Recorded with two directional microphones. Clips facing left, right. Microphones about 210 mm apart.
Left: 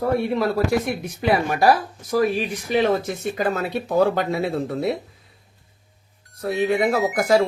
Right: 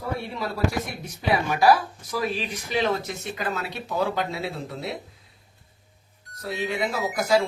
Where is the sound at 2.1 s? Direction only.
50° left (ahead or behind).